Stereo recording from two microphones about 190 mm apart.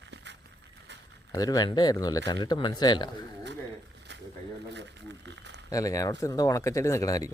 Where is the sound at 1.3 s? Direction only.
20° left (ahead or behind).